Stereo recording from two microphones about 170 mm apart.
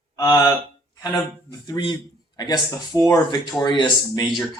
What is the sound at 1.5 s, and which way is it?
Speech, 25° left (ahead or behind).